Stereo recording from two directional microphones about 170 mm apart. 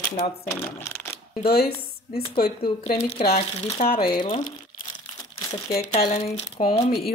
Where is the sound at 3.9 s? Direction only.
60° left (ahead or behind).